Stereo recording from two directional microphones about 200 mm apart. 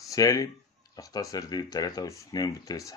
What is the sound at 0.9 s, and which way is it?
Speech, 20° left (ahead or behind).